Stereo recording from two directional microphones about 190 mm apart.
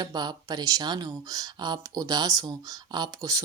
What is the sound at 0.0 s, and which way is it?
Speech, 20° right (ahead or behind).